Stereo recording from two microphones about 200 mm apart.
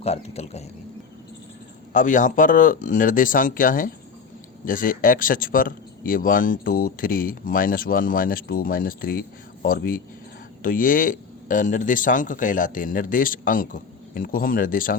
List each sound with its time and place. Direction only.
0.0 s speech: 30° left (ahead or behind)
1.9 s speech: 40° left (ahead or behind)